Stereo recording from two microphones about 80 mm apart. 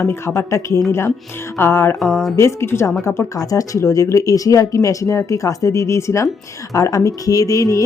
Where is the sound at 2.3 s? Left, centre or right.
Left.